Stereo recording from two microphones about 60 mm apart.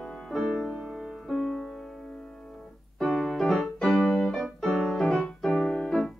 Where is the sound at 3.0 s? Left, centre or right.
Centre.